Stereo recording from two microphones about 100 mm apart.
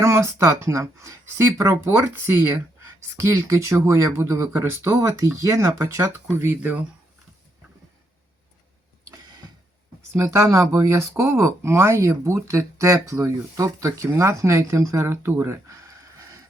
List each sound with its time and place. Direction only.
0.0 s speech: 30° right (ahead or behind)
10.2 s speech: 30° right (ahead or behind)